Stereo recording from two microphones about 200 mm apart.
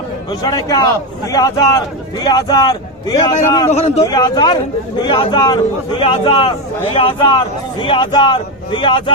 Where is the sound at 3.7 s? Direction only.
35° left (ahead or behind).